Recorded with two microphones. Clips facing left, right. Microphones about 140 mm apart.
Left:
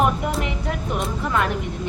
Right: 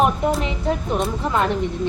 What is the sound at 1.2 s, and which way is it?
Speech, 25° right (ahead or behind).